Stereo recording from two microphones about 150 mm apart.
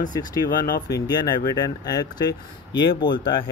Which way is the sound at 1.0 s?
25° left (ahead or behind).